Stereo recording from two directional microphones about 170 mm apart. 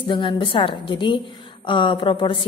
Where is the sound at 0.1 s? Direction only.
30° left (ahead or behind).